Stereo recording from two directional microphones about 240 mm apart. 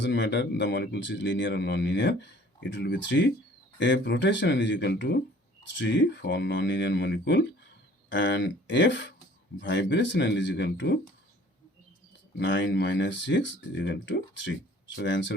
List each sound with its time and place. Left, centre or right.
0.0 s speech: left
12.4 s speech: left